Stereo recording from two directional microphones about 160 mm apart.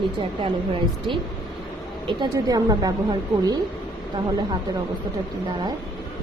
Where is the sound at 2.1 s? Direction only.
25° right (ahead or behind).